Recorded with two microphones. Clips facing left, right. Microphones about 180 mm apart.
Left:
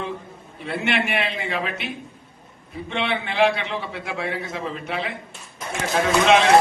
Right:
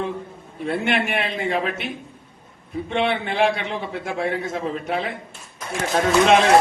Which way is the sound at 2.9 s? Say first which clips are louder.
Right 3 dB; 45° right (ahead or behind).